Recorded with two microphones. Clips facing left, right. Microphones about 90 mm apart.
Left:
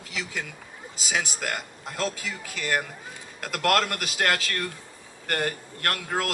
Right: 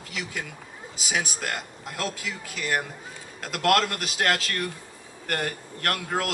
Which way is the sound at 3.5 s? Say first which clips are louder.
Right 1 dB; 15° right (ahead or behind).